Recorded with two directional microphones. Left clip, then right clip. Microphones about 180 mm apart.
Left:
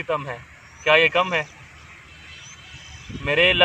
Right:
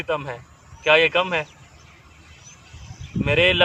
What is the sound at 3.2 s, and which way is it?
Speech, 30° right (ahead or behind).